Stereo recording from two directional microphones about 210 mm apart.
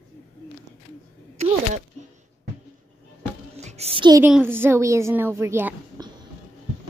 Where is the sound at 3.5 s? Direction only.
30° right (ahead or behind).